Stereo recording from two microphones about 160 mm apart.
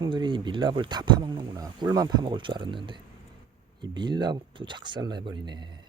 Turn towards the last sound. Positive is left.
turn(degrees=-30)  # may be behind; listen again after turning